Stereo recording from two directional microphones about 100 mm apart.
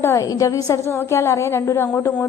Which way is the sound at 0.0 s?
30° left (ahead or behind).